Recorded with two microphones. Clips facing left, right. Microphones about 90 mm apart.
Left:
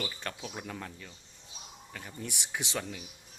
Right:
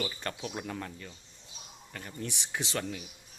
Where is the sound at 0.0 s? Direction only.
5° right (ahead or behind).